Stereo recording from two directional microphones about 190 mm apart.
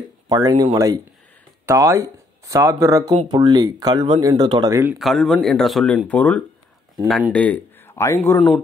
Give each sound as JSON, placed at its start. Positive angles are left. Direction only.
{"t": 0.3, "sound": "speech", "side_deg": -20}
{"t": 3.1, "sound": "speech", "side_deg": -25}
{"t": 4.9, "sound": "speech", "side_deg": 0}
{"t": 7.1, "sound": "speech", "side_deg": -5}
{"t": 7.3, "sound": "speech", "side_deg": 10}